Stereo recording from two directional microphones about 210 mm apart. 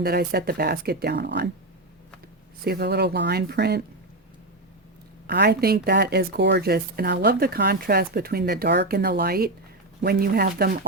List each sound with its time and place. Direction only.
0.0 s speech: 50° right (ahead or behind)
2.6 s speech: 50° right (ahead or behind)
5.2 s speech: 50° right (ahead or behind)